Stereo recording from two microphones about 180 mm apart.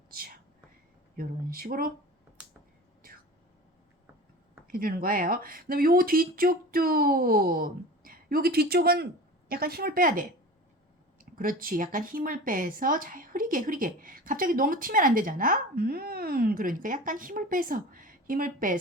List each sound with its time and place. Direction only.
0.1 s speech: 55° right (ahead or behind)
4.7 s speech: 55° right (ahead or behind)
11.3 s speech: 50° right (ahead or behind)